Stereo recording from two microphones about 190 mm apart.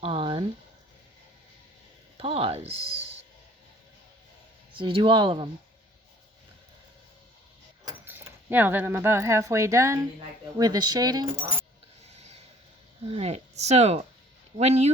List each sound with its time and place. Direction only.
0.0 s a sound: 25° right (ahead or behind)
2.1 s speech: 30° right (ahead or behind)
4.7 s speech: 30° right (ahead or behind)
8.0 s speech: 10° right (ahead or behind)
13.0 s speech: 30° right (ahead or behind)